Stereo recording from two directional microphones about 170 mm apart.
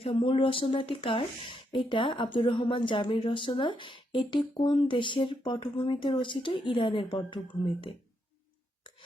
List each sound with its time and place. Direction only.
0.0 s speech: 30° left (ahead or behind)